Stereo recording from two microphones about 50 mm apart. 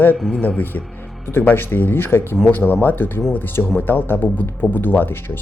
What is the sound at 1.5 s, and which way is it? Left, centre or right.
Speech, left.